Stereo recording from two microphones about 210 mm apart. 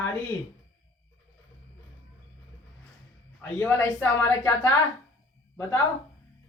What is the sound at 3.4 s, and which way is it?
A woman's voice, 10° left (ahead or behind).